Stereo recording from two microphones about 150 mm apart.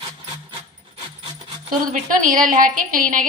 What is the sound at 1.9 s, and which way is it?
A woman's voice, 60° right (ahead or behind).